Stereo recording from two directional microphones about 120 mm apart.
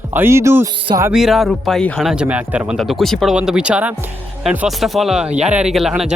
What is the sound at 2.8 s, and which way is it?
Speech, centre (ahead or behind).